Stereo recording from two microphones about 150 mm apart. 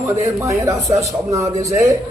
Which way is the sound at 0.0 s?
20° right (ahead or behind).